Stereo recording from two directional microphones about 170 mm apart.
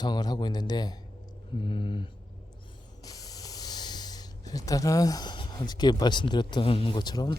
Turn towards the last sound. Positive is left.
turn(degrees=25)  # may be behind; listen again after turning